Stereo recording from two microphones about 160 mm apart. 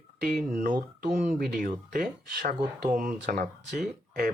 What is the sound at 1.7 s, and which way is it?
Speech, 60° right (ahead or behind).